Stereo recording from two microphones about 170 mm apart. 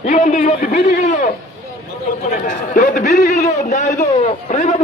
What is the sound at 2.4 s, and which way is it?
A man's voice, 55° left (ahead or behind).